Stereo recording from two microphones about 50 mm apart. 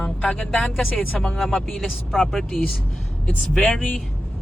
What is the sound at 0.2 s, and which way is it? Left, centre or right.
Speech, left.